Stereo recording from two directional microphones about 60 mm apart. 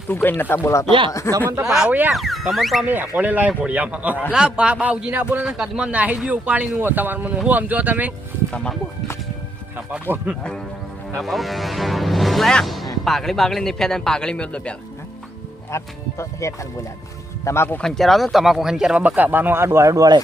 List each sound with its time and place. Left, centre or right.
0.1 s speech: left
0.7 s speech: left
1.6 s speech: centre
1.9 s speech: right
2.1 s speech: centre
2.8 s a man's voice: right
11.2 s speech: centre
15.7 s speech: left
17.4 s speech: left
17.8 s speech: centre
18.9 s a man's voice: right
19.6 s speech: right